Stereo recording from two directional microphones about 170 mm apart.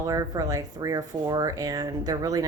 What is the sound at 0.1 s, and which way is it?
Speech, 20° right (ahead or behind).